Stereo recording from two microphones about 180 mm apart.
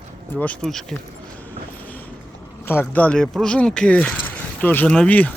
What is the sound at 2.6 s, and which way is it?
Speech, 10° left (ahead or behind).